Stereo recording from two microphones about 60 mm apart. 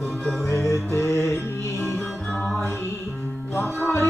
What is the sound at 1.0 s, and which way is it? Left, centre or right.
Music, left.